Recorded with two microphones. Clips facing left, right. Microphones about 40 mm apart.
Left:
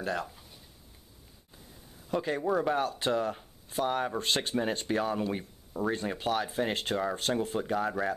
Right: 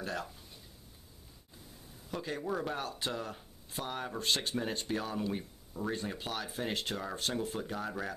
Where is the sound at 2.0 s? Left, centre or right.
Left.